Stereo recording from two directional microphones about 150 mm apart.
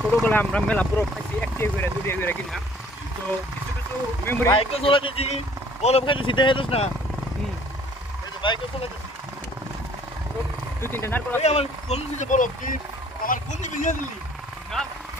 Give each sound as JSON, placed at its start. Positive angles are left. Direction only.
{"t": 0.1, "sound": "speech", "side_deg": 10}
{"t": 4.3, "sound": "speech", "side_deg": 15}
{"t": 4.5, "sound": "speech", "side_deg": 40}
{"t": 8.4, "sound": "speech", "side_deg": 30}
{"t": 10.9, "sound": "speech", "side_deg": 15}
{"t": 11.4, "sound": "speech", "side_deg": 45}
{"t": 14.7, "sound": "a sound", "side_deg": 0}